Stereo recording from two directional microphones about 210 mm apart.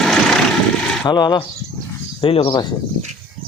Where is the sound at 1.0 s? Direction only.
20° left (ahead or behind).